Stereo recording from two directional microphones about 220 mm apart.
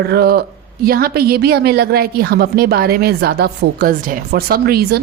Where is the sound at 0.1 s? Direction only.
45° right (ahead or behind).